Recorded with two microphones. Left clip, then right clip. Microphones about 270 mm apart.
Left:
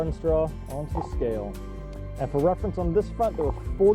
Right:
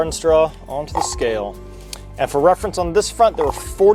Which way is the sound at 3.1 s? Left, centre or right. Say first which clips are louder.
Right 11 dB; centre.